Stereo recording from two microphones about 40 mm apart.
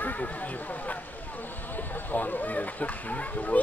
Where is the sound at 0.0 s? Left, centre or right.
Left.